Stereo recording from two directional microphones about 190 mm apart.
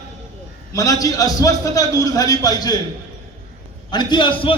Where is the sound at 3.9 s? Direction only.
25° left (ahead or behind).